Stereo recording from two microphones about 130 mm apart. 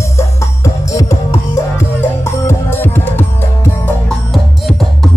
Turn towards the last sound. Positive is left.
turn(degrees=0)  # may be behind; listen again after turning